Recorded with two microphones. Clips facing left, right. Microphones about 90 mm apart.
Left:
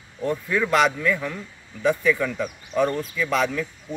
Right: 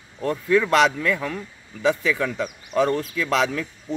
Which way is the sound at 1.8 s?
90° right.